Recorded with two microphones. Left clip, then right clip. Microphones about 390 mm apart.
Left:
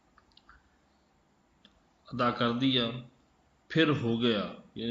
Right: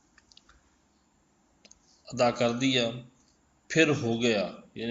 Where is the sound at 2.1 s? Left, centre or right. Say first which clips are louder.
Right 4 dB; centre.